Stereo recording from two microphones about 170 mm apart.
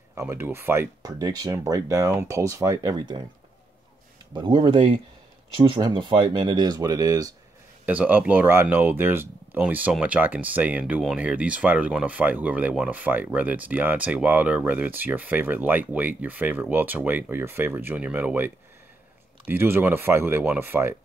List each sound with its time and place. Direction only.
0.1 s speech: 15° right (ahead or behind)
4.3 s speech: 30° right (ahead or behind)
7.8 s speech: 10° right (ahead or behind)